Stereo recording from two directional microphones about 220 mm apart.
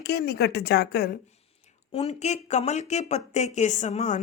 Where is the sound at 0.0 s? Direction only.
45° left (ahead or behind).